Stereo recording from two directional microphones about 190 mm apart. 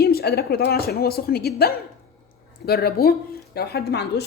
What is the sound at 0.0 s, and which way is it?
A woman's voice, 55° left (ahead or behind).